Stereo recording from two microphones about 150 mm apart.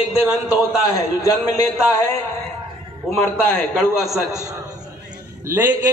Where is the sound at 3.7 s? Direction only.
Centre (ahead or behind).